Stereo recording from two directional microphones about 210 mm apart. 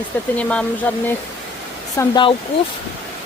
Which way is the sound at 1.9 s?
20° left (ahead or behind).